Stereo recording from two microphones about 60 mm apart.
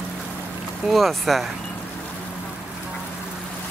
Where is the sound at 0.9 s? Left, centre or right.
Centre.